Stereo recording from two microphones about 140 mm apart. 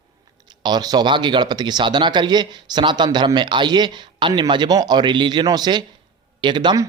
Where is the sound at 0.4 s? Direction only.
30° right (ahead or behind).